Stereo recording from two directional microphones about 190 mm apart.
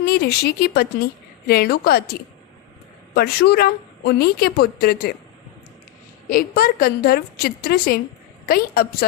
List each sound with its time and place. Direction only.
0.0 s a woman's voice: 55° left (ahead or behind)
3.2 s a woman's voice: 55° left (ahead or behind)
6.3 s a woman's voice: 50° left (ahead or behind)